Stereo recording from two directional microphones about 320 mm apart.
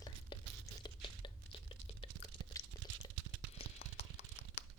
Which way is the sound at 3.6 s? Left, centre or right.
Centre.